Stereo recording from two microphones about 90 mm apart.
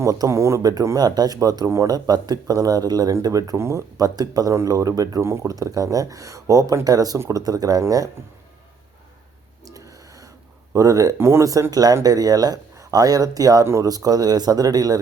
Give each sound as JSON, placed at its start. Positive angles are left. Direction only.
{"t": 0.0, "sound": "speech", "side_deg": -35}
{"t": 9.6, "sound": "a sound", "side_deg": -40}
{"t": 10.8, "sound": "speech", "side_deg": -40}